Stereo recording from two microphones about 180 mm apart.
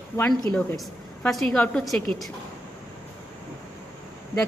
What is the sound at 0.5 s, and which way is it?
A woman's voice, 5° left (ahead or behind).